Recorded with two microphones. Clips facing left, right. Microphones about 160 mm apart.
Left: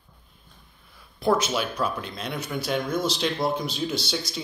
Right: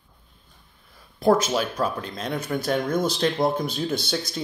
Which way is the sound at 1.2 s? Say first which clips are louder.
Right 3 dB; 45° right (ahead or behind).